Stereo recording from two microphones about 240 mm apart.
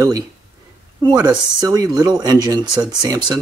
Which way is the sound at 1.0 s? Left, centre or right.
Centre.